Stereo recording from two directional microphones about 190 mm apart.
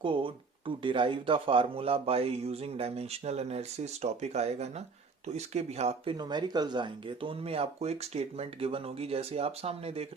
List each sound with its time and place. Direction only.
0.0 s speech: 25° right (ahead or behind)
6.1 s speech: 25° right (ahead or behind)